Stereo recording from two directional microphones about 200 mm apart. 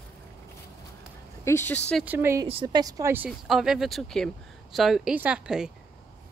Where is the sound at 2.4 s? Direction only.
25° right (ahead or behind).